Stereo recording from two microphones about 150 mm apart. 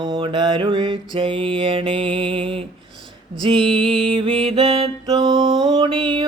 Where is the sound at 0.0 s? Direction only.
30° right (ahead or behind).